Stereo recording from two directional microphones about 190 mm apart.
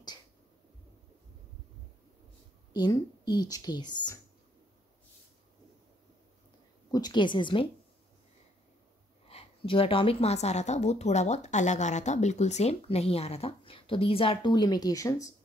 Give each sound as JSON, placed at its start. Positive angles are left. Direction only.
{"t": 2.7, "sound": "a woman's voice", "side_deg": 20}
{"t": 6.9, "sound": "a woman's voice", "side_deg": 20}
{"t": 9.3, "sound": "a woman's voice", "side_deg": 30}